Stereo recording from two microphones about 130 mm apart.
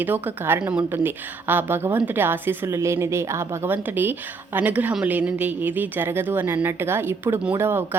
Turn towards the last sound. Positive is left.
turn(degrees=-15)  # may be behind; listen again after turning